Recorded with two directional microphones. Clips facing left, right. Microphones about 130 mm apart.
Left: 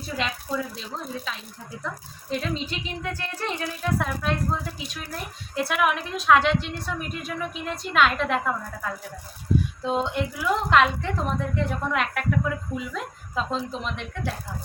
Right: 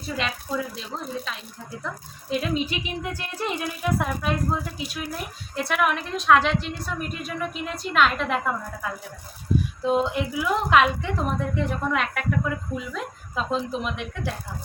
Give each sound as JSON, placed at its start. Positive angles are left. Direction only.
{"t": 0.2, "sound": "a woman's voice", "side_deg": 0}
{"t": 2.4, "sound": "a woman's voice", "side_deg": -10}